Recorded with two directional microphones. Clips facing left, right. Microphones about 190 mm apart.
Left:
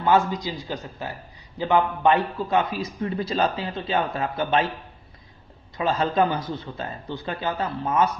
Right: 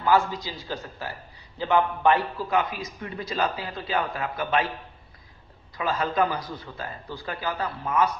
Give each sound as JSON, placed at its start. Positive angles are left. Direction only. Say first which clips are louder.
{"t": 0.0, "sound": "a man's voice", "louder": "left 2 dB", "side_deg": 20}
{"t": 5.7, "sound": "a man's voice", "louder": "left 3 dB", "side_deg": 25}